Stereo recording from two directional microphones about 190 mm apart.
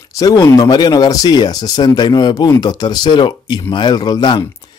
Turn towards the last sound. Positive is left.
turn(degrees=25)  # may be behind; listen again after turning